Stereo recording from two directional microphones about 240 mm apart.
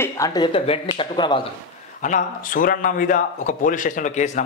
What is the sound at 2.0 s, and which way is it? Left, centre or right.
A man's voice, left.